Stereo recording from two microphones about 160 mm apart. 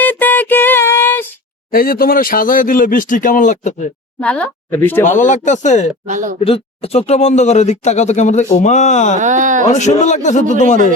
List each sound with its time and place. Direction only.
0.0 s music: 10° left (ahead or behind)
1.7 s speech: 65° left (ahead or behind); by 3.8 s 50° left (ahead or behind)
4.2 s speech: 10° left (ahead or behind)
5.0 s speech: 50° left (ahead or behind)
6.1 s speech: 55° right (ahead or behind)
6.4 s speech: 35° left (ahead or behind)
9.1 s speech: 50° right (ahead or behind)
9.6 s speech: 45° left (ahead or behind)